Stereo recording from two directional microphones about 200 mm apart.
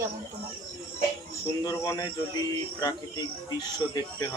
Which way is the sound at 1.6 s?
15° left (ahead or behind).